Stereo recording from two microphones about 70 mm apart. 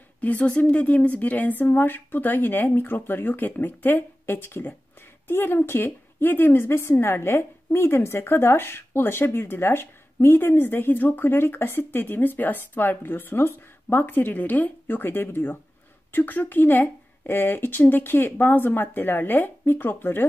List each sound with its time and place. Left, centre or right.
0.2 s a woman's voice: left